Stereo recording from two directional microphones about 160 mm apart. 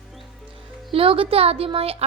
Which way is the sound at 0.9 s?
35° right (ahead or behind).